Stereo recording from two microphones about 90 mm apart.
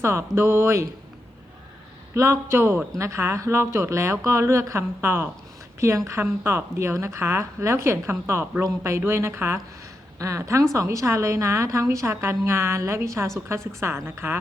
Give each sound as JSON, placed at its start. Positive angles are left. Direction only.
{"t": 0.0, "sound": "speech", "side_deg": -30}
{"t": 2.1, "sound": "a woman's voice", "side_deg": -30}